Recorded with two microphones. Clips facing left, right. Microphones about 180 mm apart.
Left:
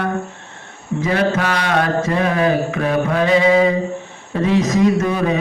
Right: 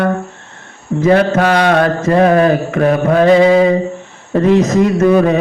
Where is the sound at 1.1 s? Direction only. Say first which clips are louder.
Right 8 dB; 50° right (ahead or behind).